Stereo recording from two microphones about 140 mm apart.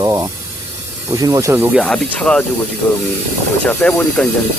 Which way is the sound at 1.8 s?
5° left (ahead or behind).